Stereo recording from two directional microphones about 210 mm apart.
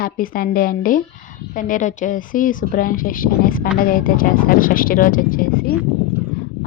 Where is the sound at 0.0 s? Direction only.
45° left (ahead or behind).